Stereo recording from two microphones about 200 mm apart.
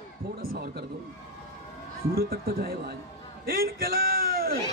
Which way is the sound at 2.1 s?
50° right (ahead or behind).